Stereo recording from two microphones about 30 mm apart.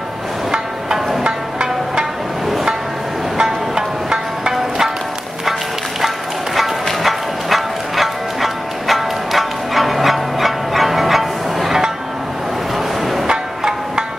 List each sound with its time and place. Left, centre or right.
1.2 s music: right
3.3 s music: right
5.9 s music: centre
13.3 s music: right